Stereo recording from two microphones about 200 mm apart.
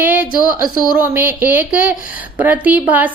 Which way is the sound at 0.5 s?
45° left (ahead or behind).